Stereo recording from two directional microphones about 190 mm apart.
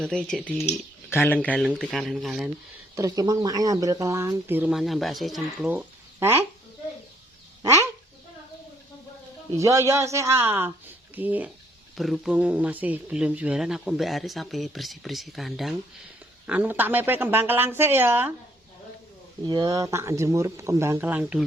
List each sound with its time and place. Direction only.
0.0 s speech: 5° left (ahead or behind)
1.6 s speech: 5° right (ahead or behind)
2.9 s speech: 15° right (ahead or behind)
7.6 s bird: 15° right (ahead or behind)
9.6 s speech: 15° right (ahead or behind)
19.5 s speech: 20° right (ahead or behind)